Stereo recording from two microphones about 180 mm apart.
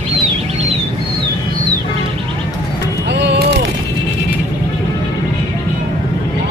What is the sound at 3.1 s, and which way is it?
Music, 70° right (ahead or behind).